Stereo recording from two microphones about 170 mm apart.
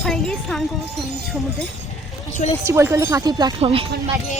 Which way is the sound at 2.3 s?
45° left (ahead or behind).